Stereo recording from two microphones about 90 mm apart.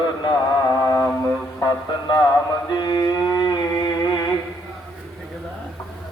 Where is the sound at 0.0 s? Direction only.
55° left (ahead or behind).